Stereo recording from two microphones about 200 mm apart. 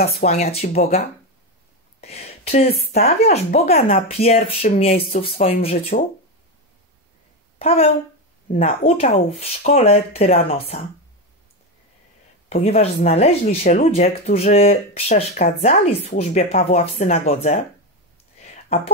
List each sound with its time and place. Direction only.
0.1 s speech: 35° left (ahead or behind)
2.0 s a sound: 30° left (ahead or behind)
2.8 s speech: 50° left (ahead or behind)
3.1 s speech: 30° left (ahead or behind)
7.5 s speech: 30° left (ahead or behind)
12.4 s speech: 30° left (ahead or behind)
18.4 s a sound: 35° left (ahead or behind)